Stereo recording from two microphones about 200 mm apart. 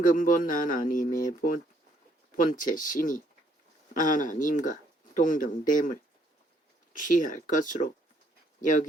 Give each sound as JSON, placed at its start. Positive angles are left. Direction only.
{"t": 0.0, "sound": "speech", "side_deg": 40}
{"t": 6.9, "sound": "speech", "side_deg": 40}